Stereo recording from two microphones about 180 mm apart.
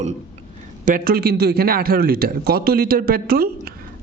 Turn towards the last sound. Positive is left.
turn(degrees=-55)  # may be behind; listen again after turning